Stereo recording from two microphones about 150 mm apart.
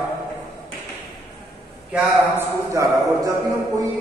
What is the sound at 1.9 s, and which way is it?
A man's voice, 15° right (ahead or behind).